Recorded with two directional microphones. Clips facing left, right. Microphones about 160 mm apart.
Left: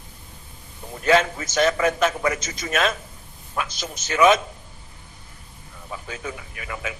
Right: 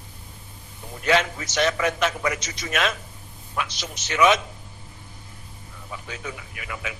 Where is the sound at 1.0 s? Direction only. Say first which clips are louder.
Left 3 dB; 45° left (ahead or behind).